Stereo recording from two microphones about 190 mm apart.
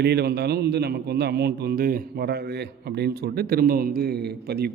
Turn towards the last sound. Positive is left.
turn(degrees=-55)  # may be behind; listen again after turning